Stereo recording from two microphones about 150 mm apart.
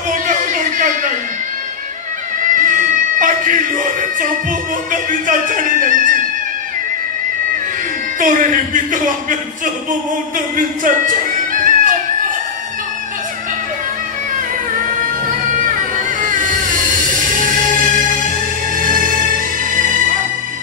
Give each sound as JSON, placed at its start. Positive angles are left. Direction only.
{"t": 0.1, "sound": "a sound", "side_deg": -60}
{"t": 2.4, "sound": "cat", "side_deg": -60}
{"t": 4.9, "sound": "music", "side_deg": -60}
{"t": 8.2, "sound": "speech", "side_deg": -60}
{"t": 10.5, "sound": "speech", "side_deg": -60}
{"t": 11.6, "sound": "music", "side_deg": -60}
{"t": 16.2, "sound": "music", "side_deg": -65}